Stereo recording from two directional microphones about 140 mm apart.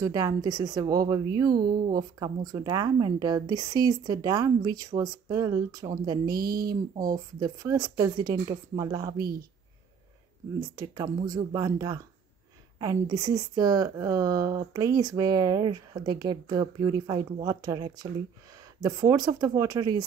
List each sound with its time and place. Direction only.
0.0 s speech: 25° right (ahead or behind)
1.5 s speech: 90° right
2.0 s speech: 25° right (ahead or behind)
6.3 s speech: 90° right
7.3 s speech: 25° right (ahead or behind)
10.6 s speech: 25° right (ahead or behind)